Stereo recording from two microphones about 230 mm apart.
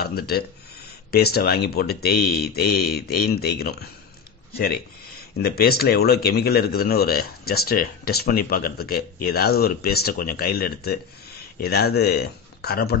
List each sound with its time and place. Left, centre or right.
0.0 s speech: left
5.4 s a man's voice: left